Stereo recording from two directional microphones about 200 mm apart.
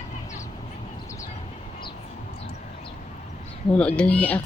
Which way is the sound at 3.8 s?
5° left (ahead or behind).